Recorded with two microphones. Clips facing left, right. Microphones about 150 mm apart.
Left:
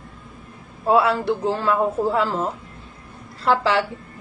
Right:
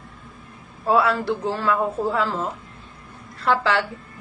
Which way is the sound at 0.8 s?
25° left (ahead or behind).